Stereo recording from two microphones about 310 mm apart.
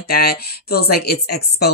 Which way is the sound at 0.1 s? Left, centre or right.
Left.